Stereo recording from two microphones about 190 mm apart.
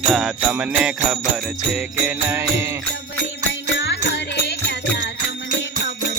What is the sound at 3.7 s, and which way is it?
Music, 65° left (ahead or behind).